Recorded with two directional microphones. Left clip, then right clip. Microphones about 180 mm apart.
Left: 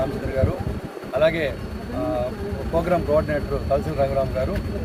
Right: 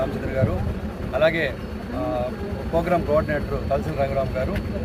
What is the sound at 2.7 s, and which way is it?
Speech, 15° left (ahead or behind).